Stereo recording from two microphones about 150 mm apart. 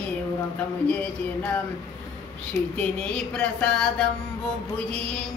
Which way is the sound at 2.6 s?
20° left (ahead or behind).